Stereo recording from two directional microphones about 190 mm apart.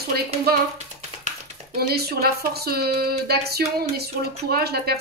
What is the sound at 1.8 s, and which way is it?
Speech, 55° right (ahead or behind).